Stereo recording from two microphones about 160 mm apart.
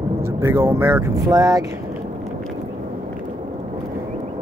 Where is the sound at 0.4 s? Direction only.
15° right (ahead or behind).